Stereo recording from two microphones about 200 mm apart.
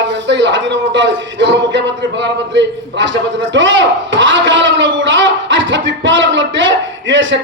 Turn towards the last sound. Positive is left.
turn(degrees=-65)  # may be behind; listen again after turning